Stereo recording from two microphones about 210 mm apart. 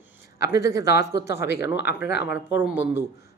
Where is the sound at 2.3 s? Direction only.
10° right (ahead or behind).